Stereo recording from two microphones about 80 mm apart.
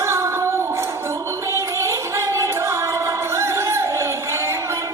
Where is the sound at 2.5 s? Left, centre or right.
Right.